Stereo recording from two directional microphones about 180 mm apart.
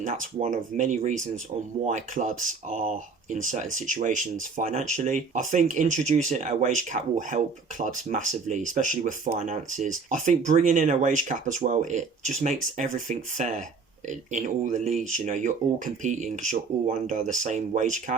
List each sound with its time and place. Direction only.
0.0 s speech: 45° right (ahead or behind)